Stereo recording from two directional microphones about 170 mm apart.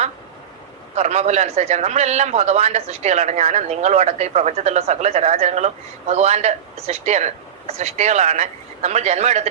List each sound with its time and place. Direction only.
0.9 s a man's voice: 40° right (ahead or behind)